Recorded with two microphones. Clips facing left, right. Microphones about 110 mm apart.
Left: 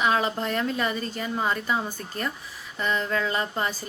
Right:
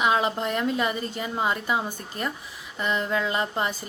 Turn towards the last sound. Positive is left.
turn(degrees=-20)  # may be behind; listen again after turning